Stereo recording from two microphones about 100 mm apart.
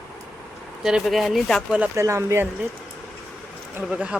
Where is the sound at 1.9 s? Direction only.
30° right (ahead or behind).